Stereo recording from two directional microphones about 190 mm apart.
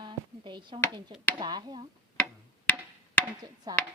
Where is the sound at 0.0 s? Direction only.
25° right (ahead or behind).